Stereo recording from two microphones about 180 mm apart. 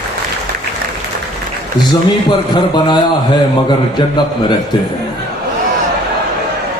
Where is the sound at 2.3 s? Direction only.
25° left (ahead or behind).